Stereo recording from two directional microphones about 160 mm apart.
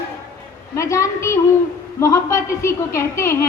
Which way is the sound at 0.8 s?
20° left (ahead or behind).